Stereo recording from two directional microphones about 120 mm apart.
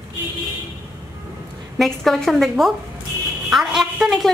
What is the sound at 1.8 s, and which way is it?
A woman's voice, centre (ahead or behind).